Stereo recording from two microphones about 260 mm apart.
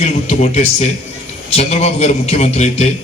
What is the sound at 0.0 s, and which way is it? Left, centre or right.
A man's voice, left.